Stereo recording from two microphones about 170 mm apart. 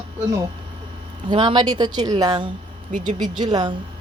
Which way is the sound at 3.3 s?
25° right (ahead or behind).